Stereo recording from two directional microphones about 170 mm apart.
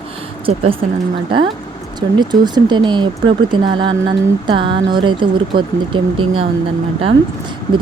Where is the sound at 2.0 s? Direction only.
25° right (ahead or behind).